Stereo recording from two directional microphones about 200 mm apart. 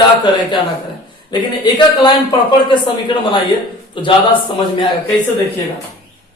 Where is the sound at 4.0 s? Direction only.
25° left (ahead or behind).